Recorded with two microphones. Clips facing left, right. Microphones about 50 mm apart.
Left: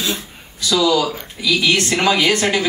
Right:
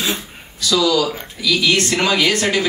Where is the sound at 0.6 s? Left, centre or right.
Left.